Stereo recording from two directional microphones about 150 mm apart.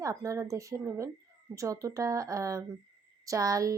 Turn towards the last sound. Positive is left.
turn(degrees=-20)  # may be behind; listen again after turning